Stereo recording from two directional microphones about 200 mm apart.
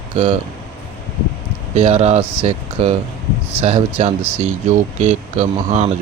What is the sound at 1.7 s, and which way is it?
Speech, 30° right (ahead or behind).